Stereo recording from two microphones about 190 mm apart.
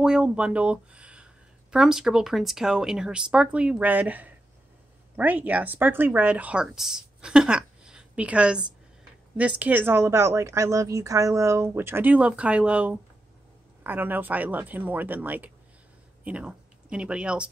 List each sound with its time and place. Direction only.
0.0 s speech: 5° right (ahead or behind)